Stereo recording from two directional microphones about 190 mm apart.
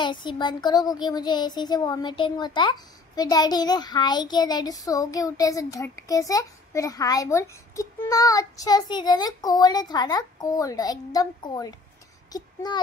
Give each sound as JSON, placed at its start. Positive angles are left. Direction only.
{"t": 0.0, "sound": "a child's voice", "side_deg": 25}